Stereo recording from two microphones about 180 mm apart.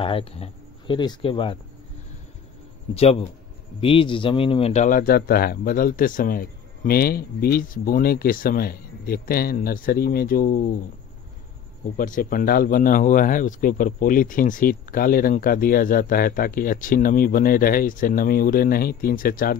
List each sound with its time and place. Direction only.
0.0 s speech: 30° left (ahead or behind)
2.9 s speech: 35° left (ahead or behind); by 10.7 s 55° left (ahead or behind)
12.0 s speech: 50° left (ahead or behind)